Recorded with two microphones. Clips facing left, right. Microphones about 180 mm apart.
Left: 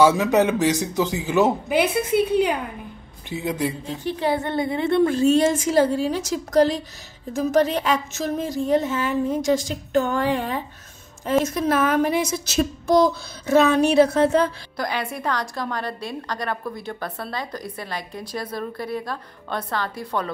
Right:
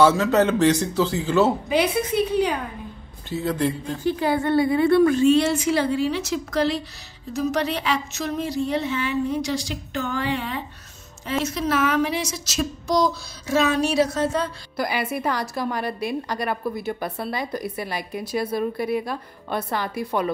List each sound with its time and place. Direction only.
0.0 s speech: 15° left (ahead or behind)
1.7 s a woman's voice: 55° left (ahead or behind)
3.3 s speech: 15° left (ahead or behind)
3.9 s a woman's voice: 20° left (ahead or behind)
5.2 s speech: 45° left (ahead or behind); by 14.4 s 60° left (ahead or behind)
14.8 s a woman's voice: 5° right (ahead or behind)